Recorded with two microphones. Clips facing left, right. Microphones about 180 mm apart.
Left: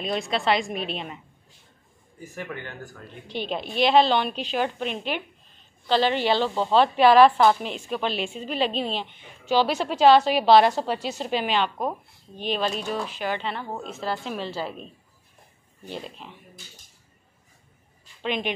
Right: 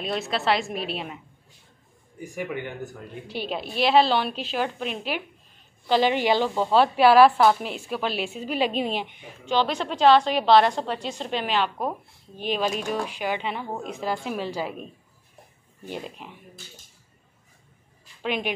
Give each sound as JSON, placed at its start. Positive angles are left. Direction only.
{"t": 0.0, "sound": "a woman's voice", "side_deg": 0}
{"t": 3.3, "sound": "a woman's voice", "side_deg": -5}
{"t": 9.5, "sound": "a woman's voice", "side_deg": 10}
{"t": 15.9, "sound": "a woman's voice", "side_deg": -10}
{"t": 18.2, "sound": "speech", "side_deg": -5}